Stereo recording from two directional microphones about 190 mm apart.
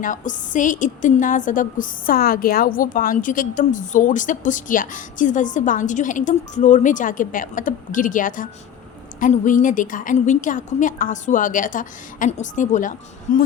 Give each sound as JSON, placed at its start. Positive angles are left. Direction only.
{"t": 0.0, "sound": "a woman's voice", "side_deg": 40}